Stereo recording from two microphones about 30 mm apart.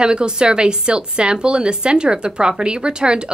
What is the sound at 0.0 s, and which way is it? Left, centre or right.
A woman's voice, right.